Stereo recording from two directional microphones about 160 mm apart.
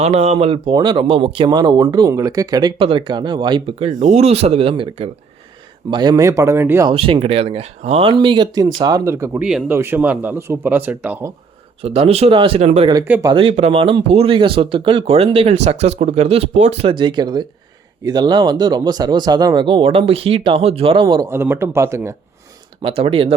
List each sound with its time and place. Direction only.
0.0 s speech: 45° right (ahead or behind); by 6.8 s 15° right (ahead or behind)
6.8 s speech: 35° right (ahead or behind); by 9.4 s 15° right (ahead or behind)
9.4 s speech: 5° right (ahead or behind)
11.8 s speech: 35° right (ahead or behind)
21.2 s speech: 15° right (ahead or behind)
22.8 s speech: 35° right (ahead or behind)